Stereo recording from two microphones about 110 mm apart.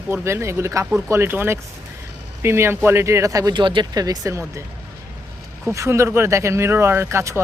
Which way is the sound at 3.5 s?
45° right (ahead or behind).